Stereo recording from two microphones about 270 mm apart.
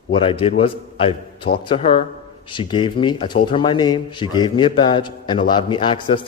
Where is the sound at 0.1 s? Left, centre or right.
Centre.